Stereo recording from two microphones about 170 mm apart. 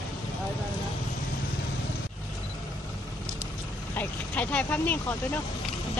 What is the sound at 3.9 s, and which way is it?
Vehicle, 10° left (ahead or behind).